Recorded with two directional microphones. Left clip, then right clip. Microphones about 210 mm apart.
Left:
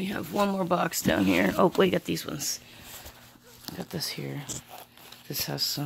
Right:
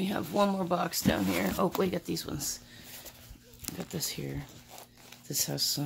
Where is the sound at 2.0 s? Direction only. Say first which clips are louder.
Left 4 dB; 10° left (ahead or behind).